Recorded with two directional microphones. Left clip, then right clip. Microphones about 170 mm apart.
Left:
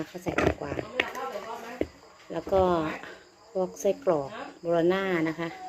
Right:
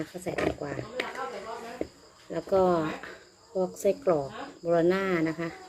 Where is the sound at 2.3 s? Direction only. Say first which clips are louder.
Even; 20° right (ahead or behind).